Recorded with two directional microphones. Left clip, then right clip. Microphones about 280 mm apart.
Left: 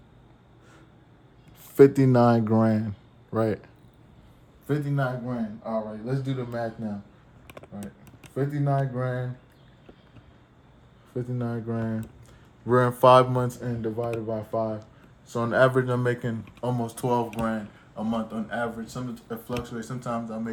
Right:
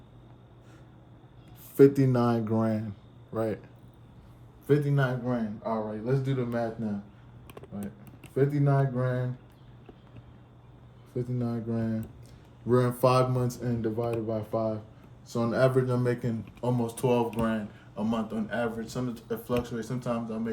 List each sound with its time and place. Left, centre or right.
1.7 s speech: left
4.6 s speech: centre
8.2 s speech: centre
11.1 s speech: centre